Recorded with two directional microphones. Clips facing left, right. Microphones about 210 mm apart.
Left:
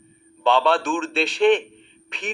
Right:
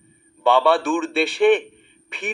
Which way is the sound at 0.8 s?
55° right (ahead or behind).